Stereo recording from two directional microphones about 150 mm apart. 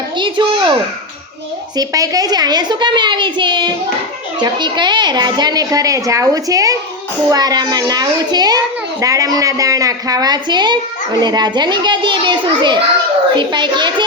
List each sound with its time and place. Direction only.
0.2 s a child's voice: 30° right (ahead or behind)
1.7 s a child's voice: 25° right (ahead or behind)